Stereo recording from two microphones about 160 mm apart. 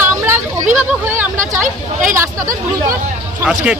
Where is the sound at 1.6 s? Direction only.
55° right (ahead or behind).